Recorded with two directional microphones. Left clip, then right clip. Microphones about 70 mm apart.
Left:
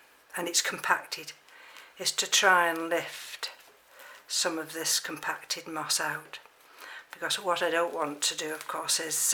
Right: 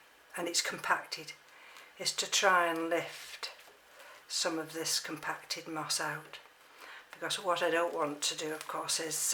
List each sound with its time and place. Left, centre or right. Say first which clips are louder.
0.3 s speech: left 4 dB; left